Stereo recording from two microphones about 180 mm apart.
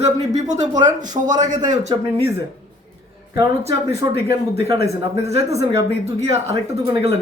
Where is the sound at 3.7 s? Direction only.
15° right (ahead or behind).